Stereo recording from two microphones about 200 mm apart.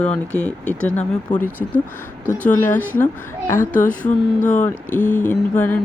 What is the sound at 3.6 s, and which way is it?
Speech, 40° left (ahead or behind).